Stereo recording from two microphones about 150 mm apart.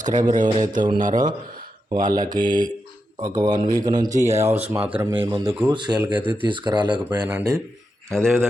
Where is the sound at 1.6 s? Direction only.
70° right (ahead or behind).